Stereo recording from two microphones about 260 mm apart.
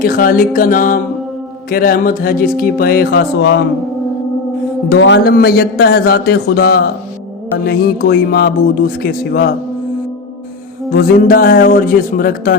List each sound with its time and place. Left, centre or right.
0.0 s a man's voice: left
4.9 s a man's voice: left
10.9 s a man's voice: left